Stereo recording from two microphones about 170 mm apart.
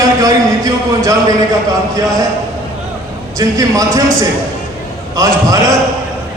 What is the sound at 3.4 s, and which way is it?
Speech, 20° right (ahead or behind).